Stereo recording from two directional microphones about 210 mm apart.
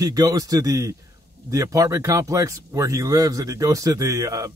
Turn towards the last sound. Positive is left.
turn(degrees=-15)  # may be behind; listen again after turning